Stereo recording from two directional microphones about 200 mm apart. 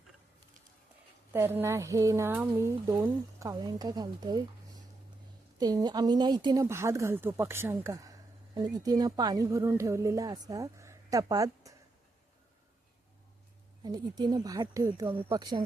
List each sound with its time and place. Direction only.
1.3 s speech: 10° right (ahead or behind)
5.5 s speech: 20° right (ahead or behind)
13.8 s speech: 20° right (ahead or behind)